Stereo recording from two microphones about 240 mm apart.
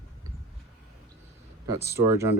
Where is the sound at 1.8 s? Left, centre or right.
Centre.